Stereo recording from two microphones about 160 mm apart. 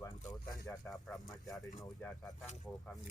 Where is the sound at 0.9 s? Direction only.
Centre (ahead or behind).